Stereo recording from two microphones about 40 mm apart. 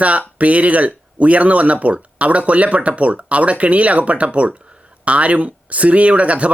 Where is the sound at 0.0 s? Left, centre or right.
Right.